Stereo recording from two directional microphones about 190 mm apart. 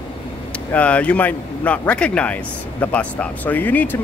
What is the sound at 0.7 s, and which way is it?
Speech, 5° left (ahead or behind).